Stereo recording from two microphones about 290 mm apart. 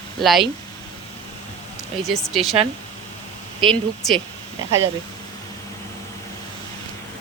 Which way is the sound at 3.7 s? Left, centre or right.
Centre.